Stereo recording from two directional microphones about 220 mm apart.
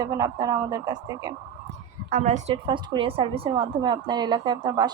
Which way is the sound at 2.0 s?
35° right (ahead or behind).